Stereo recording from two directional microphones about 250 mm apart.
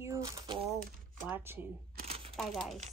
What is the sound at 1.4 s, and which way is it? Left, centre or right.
Speech, centre.